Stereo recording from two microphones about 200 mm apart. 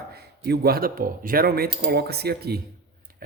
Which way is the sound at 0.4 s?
50° right (ahead or behind).